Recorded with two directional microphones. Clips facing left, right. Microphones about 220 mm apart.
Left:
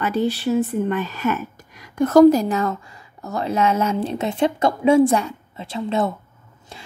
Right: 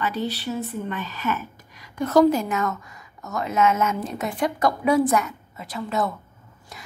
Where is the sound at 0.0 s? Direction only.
50° left (ahead or behind).